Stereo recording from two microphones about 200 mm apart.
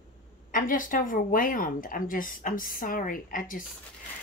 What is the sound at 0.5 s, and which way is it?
Speech, 45° left (ahead or behind).